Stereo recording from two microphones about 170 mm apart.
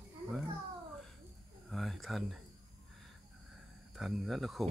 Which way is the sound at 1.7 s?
Centre (ahead or behind).